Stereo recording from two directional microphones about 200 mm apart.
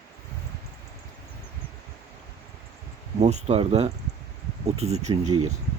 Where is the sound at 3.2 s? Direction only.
35° right (ahead or behind).